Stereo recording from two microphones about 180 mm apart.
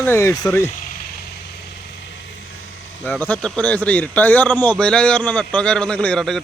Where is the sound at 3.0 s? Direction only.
10° left (ahead or behind).